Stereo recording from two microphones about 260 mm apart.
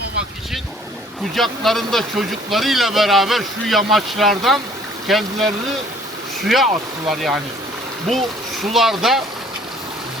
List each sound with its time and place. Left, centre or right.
1.4 s speech: centre
7.1 s speech: centre